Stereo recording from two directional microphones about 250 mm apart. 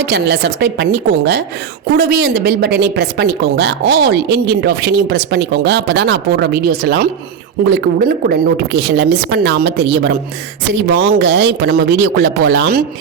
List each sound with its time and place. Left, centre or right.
0.0 s a woman's voice: right
11.2 s a woman's voice: right